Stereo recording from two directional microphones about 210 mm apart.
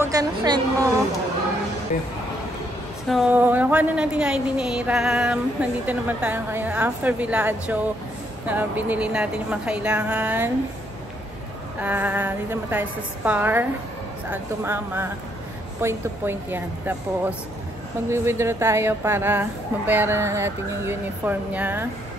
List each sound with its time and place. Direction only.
0.0 s a woman's voice: 15° right (ahead or behind)
3.1 s a woman's voice: 5° right (ahead or behind)
11.8 s a woman's voice: 10° right (ahead or behind)